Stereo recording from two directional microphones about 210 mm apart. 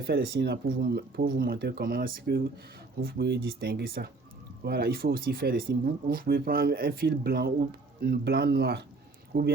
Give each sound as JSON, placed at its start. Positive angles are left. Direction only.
{"t": 0.0, "sound": "speech", "side_deg": -50}